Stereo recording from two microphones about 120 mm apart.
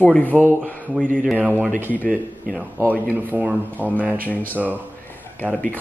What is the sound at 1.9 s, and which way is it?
Mantra, 15° left (ahead or behind).